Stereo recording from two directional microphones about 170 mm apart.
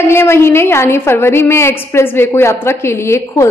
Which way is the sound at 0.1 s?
15° left (ahead or behind).